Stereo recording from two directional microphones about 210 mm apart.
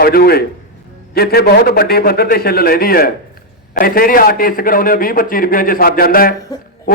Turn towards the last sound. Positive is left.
turn(degrees=45)  # may be behind; listen again after turning